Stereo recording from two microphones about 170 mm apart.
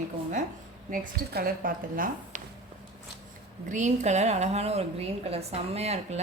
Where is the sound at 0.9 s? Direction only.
65° right (ahead or behind).